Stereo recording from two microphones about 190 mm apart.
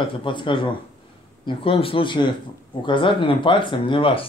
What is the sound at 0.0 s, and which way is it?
A man's voice, 25° left (ahead or behind).